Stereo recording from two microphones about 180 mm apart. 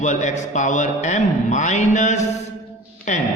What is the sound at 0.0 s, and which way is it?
A man's voice, 40° left (ahead or behind).